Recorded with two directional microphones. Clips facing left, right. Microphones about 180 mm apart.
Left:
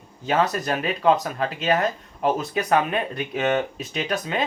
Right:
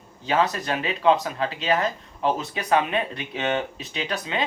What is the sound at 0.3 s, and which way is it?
Speech, 40° left (ahead or behind).